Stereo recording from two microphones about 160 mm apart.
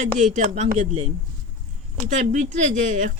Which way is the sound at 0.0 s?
50° right (ahead or behind).